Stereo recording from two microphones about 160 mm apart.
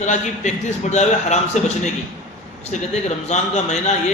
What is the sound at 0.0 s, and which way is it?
A man's voice, 50° left (ahead or behind).